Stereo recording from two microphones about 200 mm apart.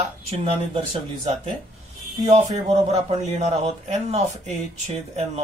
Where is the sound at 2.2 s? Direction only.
35° right (ahead or behind).